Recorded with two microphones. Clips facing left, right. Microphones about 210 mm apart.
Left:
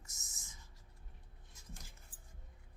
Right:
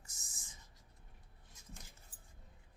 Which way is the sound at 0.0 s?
30° right (ahead or behind).